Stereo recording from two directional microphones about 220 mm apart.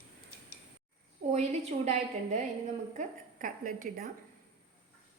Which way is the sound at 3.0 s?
40° right (ahead or behind).